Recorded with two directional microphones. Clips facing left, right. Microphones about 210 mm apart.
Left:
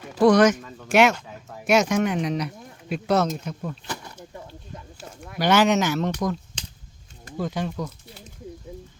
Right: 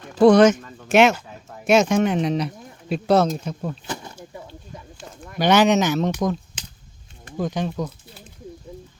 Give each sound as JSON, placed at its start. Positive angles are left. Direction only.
{"t": 0.2, "sound": "speech", "side_deg": -25}
{"t": 4.9, "sound": "a sound", "side_deg": 5}
{"t": 5.4, "sound": "speech", "side_deg": -20}
{"t": 7.3, "sound": "speech", "side_deg": -15}